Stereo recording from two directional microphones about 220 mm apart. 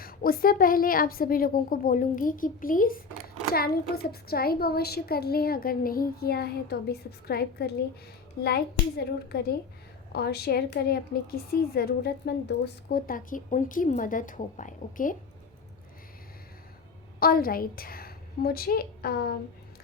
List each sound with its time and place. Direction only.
0.0 s a woman's voice: 40° left (ahead or behind)
17.2 s a woman's voice: 40° left (ahead or behind)